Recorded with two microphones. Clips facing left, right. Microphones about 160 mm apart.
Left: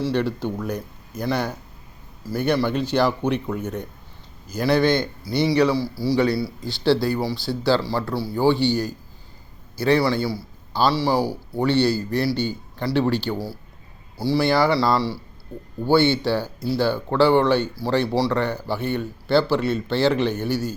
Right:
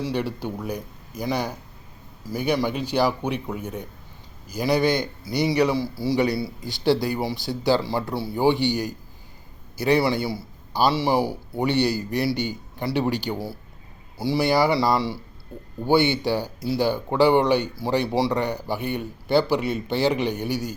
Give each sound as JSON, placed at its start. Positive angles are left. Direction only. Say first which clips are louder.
{"t": 0.0, "sound": "a man's voice", "louder": "left 4 dB", "side_deg": -10}